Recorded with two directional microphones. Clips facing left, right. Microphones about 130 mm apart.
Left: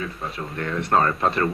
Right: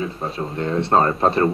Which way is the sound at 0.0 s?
30° right (ahead or behind).